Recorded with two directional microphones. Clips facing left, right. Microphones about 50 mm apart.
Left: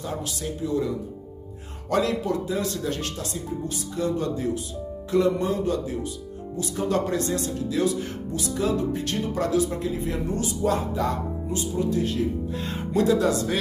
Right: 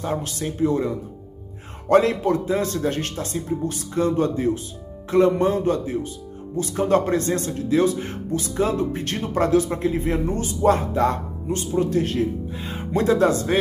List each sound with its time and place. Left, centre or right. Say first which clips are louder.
0.0 s speech: right 5 dB; right